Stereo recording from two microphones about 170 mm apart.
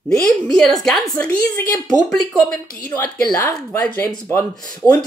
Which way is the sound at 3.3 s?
20° left (ahead or behind).